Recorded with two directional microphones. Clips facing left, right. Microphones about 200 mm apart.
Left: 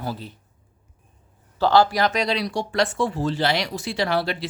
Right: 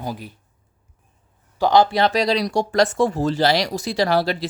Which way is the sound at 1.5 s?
15° right (ahead or behind).